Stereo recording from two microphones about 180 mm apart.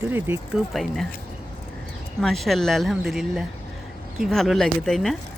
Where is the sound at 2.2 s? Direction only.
Centre (ahead or behind).